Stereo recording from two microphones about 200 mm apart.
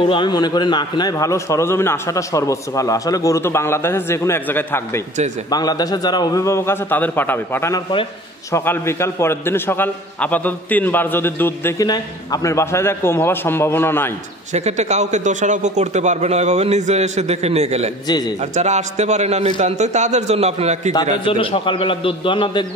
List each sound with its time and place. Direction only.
0.1 s a man's voice: 20° left (ahead or behind)
7.9 s a man's voice: 25° left (ahead or behind)
8.5 s a man's voice: 15° left (ahead or behind)
14.5 s a man's voice: 35° right (ahead or behind)
18.0 s a man's voice: 20° left (ahead or behind)
18.4 s a man's voice: 35° right (ahead or behind)
21.2 s a man's voice: 25° left (ahead or behind)